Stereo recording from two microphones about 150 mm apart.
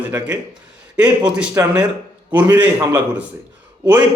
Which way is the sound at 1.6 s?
20° right (ahead or behind).